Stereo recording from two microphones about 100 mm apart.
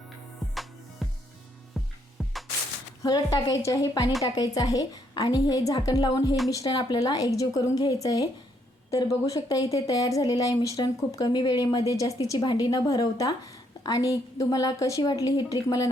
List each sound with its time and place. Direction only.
0.5 s music: centre (ahead or behind)
3.0 s speech: 40° left (ahead or behind)